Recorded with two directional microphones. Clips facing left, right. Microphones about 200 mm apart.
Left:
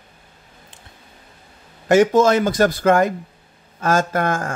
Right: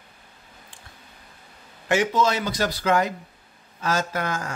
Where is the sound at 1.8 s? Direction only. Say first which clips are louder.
Left 8 dB; 45° left (ahead or behind).